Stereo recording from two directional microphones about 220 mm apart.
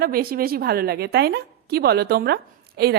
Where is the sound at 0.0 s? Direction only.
45° right (ahead or behind).